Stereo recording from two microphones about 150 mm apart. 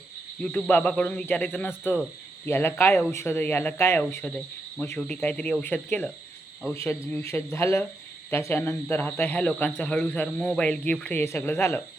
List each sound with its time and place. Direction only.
0.4 s speech: 5° left (ahead or behind)